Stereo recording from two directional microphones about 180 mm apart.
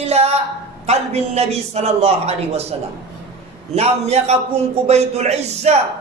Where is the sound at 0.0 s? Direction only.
35° right (ahead or behind).